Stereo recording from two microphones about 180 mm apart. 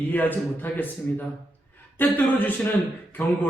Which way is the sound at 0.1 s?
10° left (ahead or behind).